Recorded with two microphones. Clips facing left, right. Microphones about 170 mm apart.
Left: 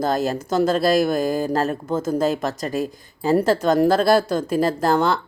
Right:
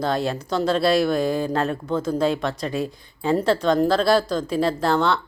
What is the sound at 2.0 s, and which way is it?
A woman's voice, 45° left (ahead or behind).